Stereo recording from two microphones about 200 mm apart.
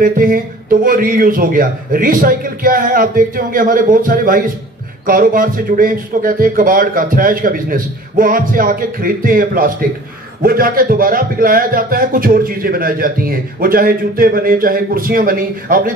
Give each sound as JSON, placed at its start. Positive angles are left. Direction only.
{"t": 0.0, "sound": "a man's voice", "side_deg": -45}